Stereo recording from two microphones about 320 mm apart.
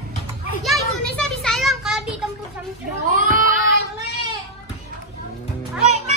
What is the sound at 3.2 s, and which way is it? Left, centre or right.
Child singing, right.